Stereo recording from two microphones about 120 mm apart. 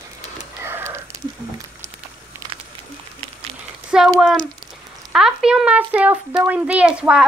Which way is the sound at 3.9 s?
5° right (ahead or behind).